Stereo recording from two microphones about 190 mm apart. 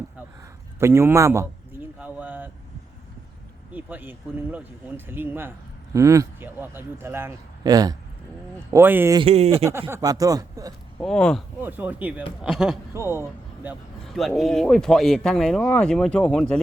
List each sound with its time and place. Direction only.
0.8 s a man's voice: 15° right (ahead or behind)
2.0 s a sound: 5° right (ahead or behind)
3.7 s a man's voice: 10° right (ahead or behind)
9.1 s speech: 30° right (ahead or behind)
9.9 s speech: 20° right (ahead or behind)
11.0 s speech: 5° left (ahead or behind)
11.6 s a man's voice: 10° right (ahead or behind)
12.9 s speech: 15° right (ahead or behind)
14.0 s speech: centre (ahead or behind)